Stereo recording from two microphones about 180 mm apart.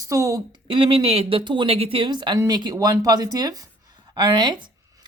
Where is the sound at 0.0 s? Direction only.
15° right (ahead or behind).